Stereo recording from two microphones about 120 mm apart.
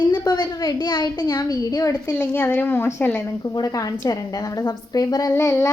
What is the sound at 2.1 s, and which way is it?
A woman's voice, 20° left (ahead or behind).